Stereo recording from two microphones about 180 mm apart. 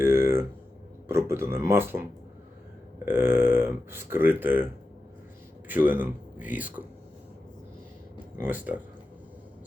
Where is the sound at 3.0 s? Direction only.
10° right (ahead or behind).